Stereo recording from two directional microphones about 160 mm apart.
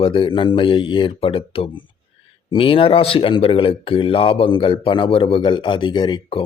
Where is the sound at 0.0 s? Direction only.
30° left (ahead or behind).